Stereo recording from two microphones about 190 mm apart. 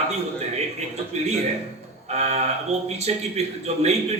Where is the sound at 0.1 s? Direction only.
35° right (ahead or behind).